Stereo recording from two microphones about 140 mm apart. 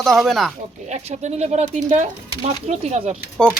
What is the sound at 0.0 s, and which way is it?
Speech, centre (ahead or behind).